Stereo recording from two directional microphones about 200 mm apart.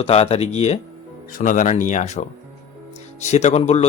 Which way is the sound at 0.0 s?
30° left (ahead or behind).